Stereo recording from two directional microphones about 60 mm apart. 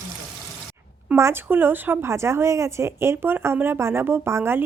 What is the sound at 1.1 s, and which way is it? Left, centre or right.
Speech, right.